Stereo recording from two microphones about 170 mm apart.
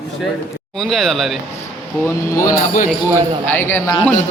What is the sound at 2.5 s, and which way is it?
Speech, 50° left (ahead or behind).